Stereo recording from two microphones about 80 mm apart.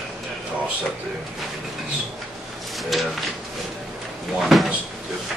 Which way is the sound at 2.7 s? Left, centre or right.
Centre.